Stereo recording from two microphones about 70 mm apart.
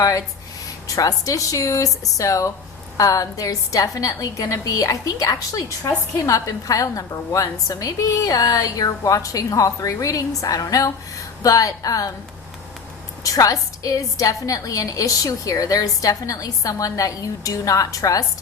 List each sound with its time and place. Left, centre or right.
0.9 s a woman's voice: left
13.2 s a woman's voice: left